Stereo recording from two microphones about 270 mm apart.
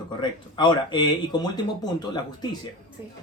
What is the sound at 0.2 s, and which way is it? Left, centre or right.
Speech, centre.